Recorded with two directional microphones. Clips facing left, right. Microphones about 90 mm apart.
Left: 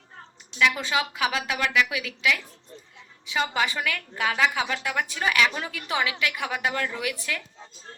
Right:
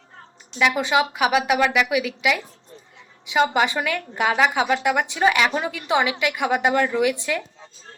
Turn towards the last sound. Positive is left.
turn(degrees=-25)  # may be behind; listen again after turning